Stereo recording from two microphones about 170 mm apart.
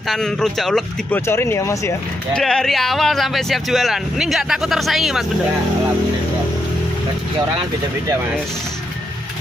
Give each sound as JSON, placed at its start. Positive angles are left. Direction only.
{"t": 0.1, "sound": "speech", "side_deg": 0}
{"t": 1.2, "sound": "speech", "side_deg": 15}
{"t": 2.3, "sound": "speech", "side_deg": 0}